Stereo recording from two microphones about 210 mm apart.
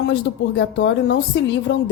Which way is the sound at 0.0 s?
55° left (ahead or behind).